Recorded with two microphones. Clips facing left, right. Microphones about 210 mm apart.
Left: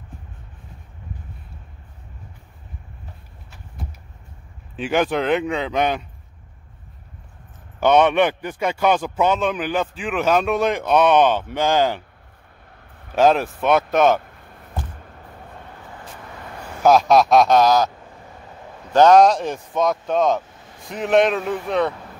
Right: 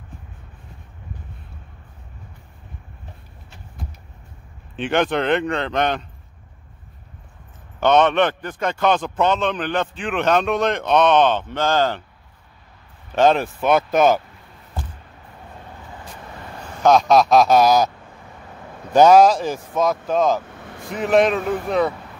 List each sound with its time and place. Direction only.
4.7 s speech: 5° left (ahead or behind)
7.8 s a man's voice: 10° left (ahead or behind)
13.1 s speech: 5° left (ahead or behind)
16.8 s speech: centre (ahead or behind)
18.9 s speech: 5° right (ahead or behind)
20.4 s vehicle: 65° right (ahead or behind)
20.9 s speech: centre (ahead or behind)